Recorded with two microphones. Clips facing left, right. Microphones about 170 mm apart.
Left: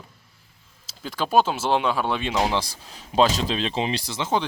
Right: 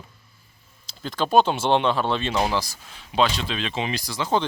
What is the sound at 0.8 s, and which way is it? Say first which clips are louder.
Speech: right 2 dB; 5° left (ahead or behind).